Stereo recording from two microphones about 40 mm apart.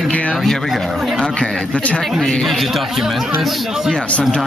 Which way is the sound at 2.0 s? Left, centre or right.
Centre.